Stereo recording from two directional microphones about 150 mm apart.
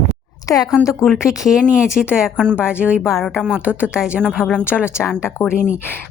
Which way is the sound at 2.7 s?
10° right (ahead or behind).